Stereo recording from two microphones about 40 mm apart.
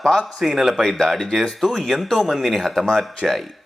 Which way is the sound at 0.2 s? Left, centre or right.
Centre.